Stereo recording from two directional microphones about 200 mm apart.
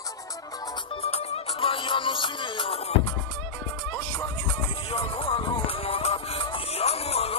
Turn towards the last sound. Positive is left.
turn(degrees=30)  # may be behind; listen again after turning